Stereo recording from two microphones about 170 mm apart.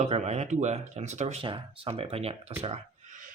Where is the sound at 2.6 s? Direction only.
45° right (ahead or behind).